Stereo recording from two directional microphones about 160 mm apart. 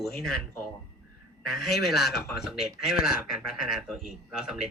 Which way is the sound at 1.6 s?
Centre (ahead or behind).